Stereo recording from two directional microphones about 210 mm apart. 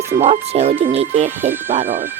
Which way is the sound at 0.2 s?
30° right (ahead or behind).